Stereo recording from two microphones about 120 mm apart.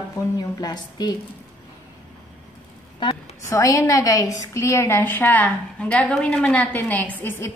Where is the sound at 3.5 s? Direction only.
25° left (ahead or behind).